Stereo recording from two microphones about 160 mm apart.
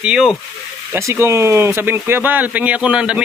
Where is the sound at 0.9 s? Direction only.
15° right (ahead or behind).